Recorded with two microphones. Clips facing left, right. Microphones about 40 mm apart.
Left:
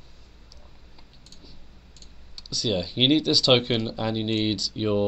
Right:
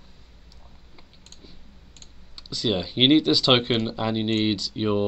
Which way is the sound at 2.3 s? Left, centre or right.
Centre.